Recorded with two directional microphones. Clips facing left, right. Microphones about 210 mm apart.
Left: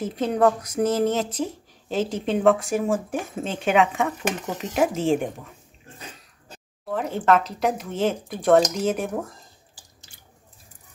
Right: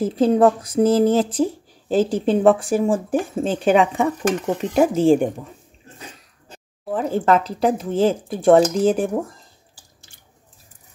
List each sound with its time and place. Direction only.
0.0 s speech: 30° right (ahead or behind)
6.9 s speech: 35° right (ahead or behind)